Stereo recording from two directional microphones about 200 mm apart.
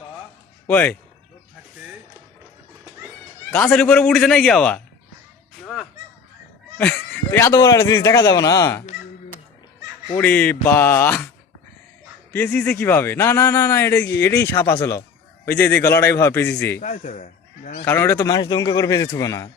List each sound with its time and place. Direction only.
0.7 s speech: 10° left (ahead or behind)
3.5 s a man's voice: 10° left (ahead or behind)
6.7 s speech: 10° left (ahead or behind)
10.1 s speech: 10° left (ahead or behind)
12.3 s speech: 10° left (ahead or behind)
16.8 s speech: 35° left (ahead or behind)
17.8 s speech: 15° left (ahead or behind)